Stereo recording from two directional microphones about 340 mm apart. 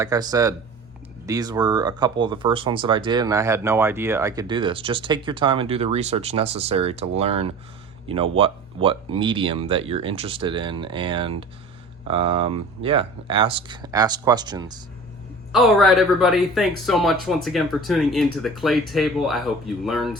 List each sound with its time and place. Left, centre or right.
0.0 s speech: centre
15.5 s speech: centre